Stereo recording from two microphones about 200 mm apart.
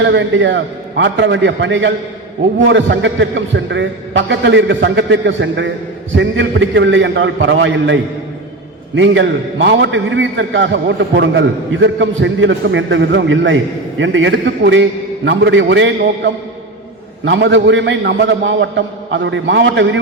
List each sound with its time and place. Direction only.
0.0 s a man's voice: 65° right (ahead or behind)
9.0 s a man's voice: 65° right (ahead or behind)